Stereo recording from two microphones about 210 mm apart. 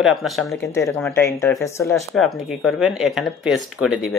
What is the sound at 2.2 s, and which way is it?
Speech, centre (ahead or behind).